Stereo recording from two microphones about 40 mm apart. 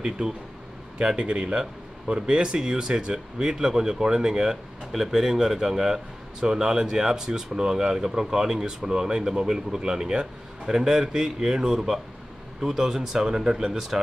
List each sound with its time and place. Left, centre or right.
0.2 s speech: right
4.9 s speech: centre